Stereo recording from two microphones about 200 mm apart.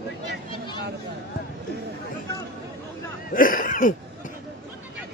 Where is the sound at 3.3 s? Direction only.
45° left (ahead or behind).